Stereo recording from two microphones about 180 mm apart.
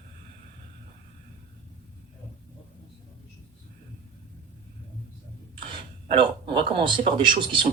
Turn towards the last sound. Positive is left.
turn(degrees=-25)  # may be behind; listen again after turning